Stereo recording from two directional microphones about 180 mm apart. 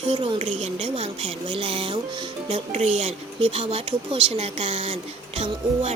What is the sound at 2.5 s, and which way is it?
A woman's voice, 40° right (ahead or behind).